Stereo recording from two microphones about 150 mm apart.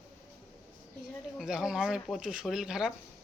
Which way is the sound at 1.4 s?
5° right (ahead or behind).